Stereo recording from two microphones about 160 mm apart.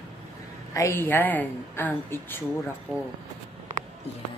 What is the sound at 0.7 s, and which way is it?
A woman's voice, 15° left (ahead or behind).